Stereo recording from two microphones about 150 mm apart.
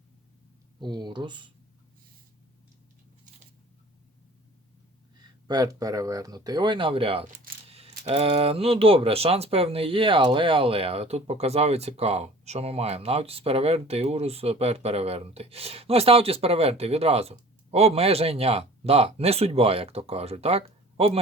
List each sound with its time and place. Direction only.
0.8 s speech: 30° right (ahead or behind)
5.5 s speech: 25° right (ahead or behind)